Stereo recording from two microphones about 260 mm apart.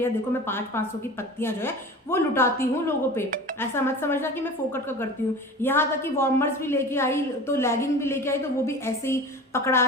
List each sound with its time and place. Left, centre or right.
0.0 s a woman's voice: centre
5.6 s a woman's voice: centre